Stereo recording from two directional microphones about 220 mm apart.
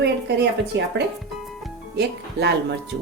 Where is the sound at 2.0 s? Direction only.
50° right (ahead or behind).